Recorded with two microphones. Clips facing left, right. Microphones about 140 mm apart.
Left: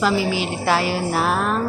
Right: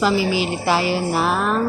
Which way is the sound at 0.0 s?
Centre (ahead or behind).